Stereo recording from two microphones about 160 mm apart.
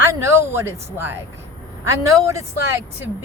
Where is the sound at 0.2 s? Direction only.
15° right (ahead or behind).